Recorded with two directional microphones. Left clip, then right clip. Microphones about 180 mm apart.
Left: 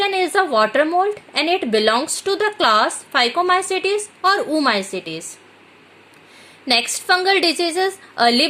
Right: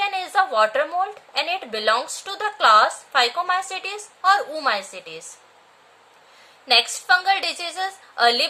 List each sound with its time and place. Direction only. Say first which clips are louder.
0.0 s a woman's voice: left 3 dB; 35° left (ahead or behind)
6.7 s a woman's voice: even; 40° left (ahead or behind)